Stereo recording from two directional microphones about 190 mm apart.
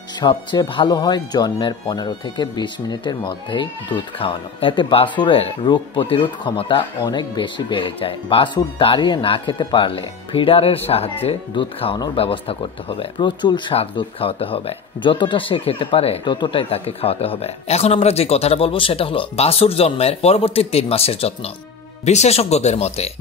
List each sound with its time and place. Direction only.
0.2 s speech: 25° left (ahead or behind)